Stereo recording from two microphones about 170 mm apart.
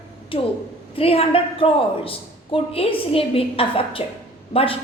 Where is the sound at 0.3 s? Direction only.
30° left (ahead or behind).